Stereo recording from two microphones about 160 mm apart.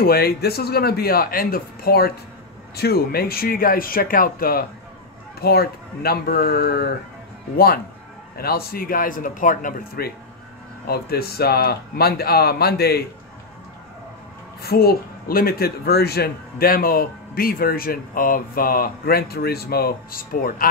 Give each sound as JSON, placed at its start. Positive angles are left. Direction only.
{"t": 0.0, "sound": "speech", "side_deg": 75}
{"t": 10.9, "sound": "speech", "side_deg": 75}
{"t": 14.6, "sound": "speech", "side_deg": 75}